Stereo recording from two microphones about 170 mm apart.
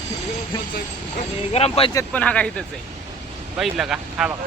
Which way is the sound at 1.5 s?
35° left (ahead or behind).